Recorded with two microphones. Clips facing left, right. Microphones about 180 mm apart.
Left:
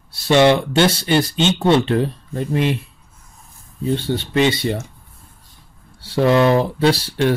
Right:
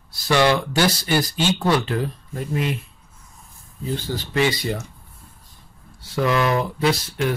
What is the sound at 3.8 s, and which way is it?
Speech, 25° left (ahead or behind).